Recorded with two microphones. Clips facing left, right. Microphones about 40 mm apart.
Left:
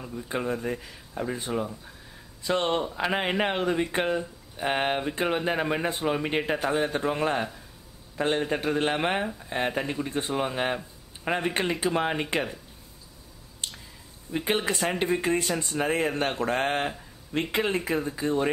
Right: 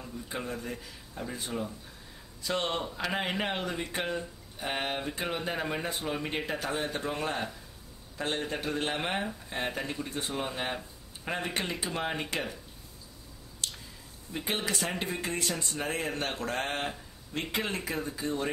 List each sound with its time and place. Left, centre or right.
0.0 s speech: left
13.6 s squish: left
14.4 s speech: left